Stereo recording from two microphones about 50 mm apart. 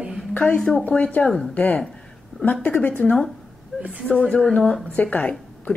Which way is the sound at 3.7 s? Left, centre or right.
Centre.